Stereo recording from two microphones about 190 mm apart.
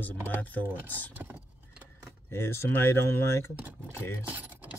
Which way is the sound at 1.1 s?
10° right (ahead or behind).